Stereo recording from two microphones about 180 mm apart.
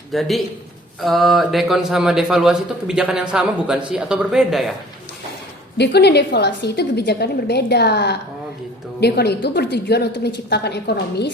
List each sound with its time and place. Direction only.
0.1 s speech: centre (ahead or behind)
5.7 s a woman's voice: 70° left (ahead or behind)